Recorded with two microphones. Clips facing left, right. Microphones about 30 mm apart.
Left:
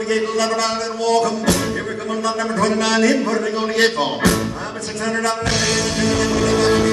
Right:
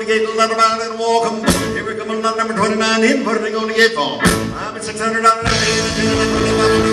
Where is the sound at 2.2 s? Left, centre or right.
Right.